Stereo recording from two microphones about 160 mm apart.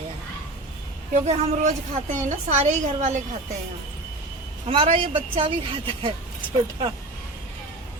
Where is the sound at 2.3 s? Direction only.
50° right (ahead or behind).